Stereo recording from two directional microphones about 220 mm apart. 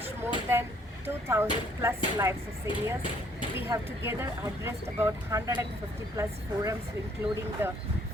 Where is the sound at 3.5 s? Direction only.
10° right (ahead or behind).